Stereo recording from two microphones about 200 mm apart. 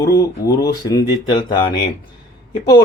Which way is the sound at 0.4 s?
20° left (ahead or behind).